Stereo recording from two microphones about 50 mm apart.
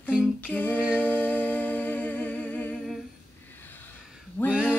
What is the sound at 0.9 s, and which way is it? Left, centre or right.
Humming, left.